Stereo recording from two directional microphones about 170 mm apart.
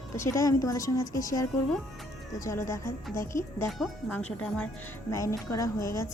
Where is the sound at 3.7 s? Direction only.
Centre (ahead or behind).